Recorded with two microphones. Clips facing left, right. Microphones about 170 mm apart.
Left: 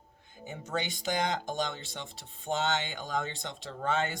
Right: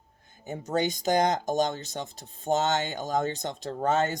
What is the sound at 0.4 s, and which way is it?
Speech, 40° right (ahead or behind).